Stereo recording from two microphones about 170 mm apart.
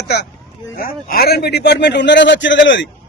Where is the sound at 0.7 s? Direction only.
60° left (ahead or behind); by 2.8 s 90° left.